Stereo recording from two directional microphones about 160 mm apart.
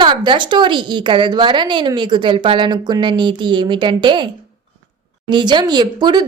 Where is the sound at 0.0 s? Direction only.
30° right (ahead or behind).